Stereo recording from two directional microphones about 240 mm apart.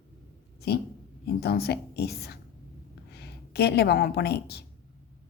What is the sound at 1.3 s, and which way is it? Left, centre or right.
A man's voice, left.